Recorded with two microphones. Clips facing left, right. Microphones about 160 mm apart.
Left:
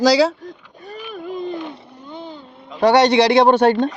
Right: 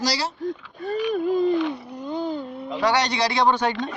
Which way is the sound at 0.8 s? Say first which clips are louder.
Right 9 dB; 90° right.